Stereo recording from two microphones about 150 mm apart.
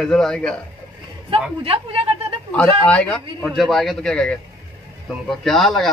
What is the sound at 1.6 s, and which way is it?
Speech, 40° right (ahead or behind).